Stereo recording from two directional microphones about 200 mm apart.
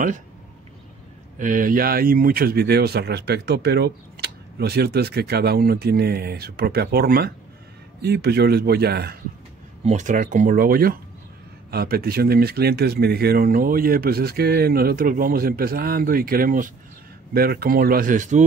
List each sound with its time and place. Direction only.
1.4 s speech: 40° right (ahead or behind)
9.8 s speech: 40° right (ahead or behind)